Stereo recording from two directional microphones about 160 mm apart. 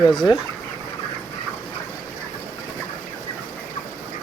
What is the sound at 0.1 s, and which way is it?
Speech, 25° left (ahead or behind).